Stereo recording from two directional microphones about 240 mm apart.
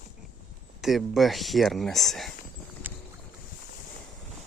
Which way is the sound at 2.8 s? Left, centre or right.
Centre.